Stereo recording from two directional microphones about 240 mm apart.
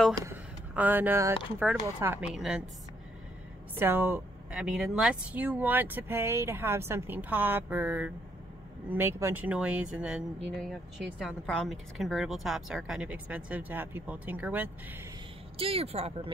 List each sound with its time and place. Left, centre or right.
0.2 s speech: centre
3.7 s speech: centre
15.5 s speech: right